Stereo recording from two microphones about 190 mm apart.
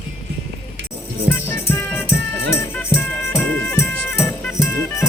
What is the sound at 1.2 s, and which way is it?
Music, 10° left (ahead or behind).